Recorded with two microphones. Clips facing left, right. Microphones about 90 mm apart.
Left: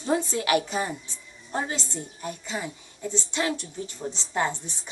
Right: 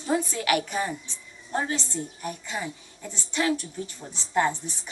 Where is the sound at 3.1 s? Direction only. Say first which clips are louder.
Right 1 dB; 20° left (ahead or behind).